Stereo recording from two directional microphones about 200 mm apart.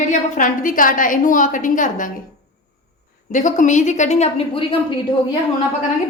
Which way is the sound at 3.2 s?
40° left (ahead or behind).